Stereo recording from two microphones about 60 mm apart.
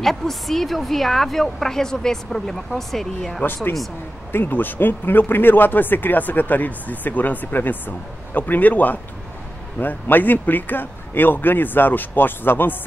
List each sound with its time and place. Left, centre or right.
0.0 s a woman's voice: centre
4.3 s speech: left